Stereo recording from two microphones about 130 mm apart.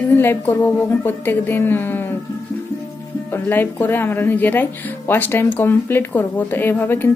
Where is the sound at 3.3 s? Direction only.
15° left (ahead or behind).